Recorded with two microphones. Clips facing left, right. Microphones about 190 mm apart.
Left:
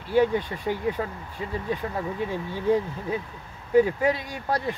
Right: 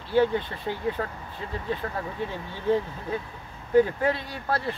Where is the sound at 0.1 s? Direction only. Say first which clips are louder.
Left 1 dB; 15° left (ahead or behind).